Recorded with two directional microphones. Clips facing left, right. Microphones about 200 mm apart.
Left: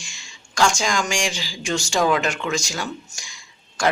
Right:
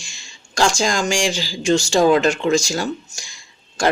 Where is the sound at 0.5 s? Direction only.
30° right (ahead or behind).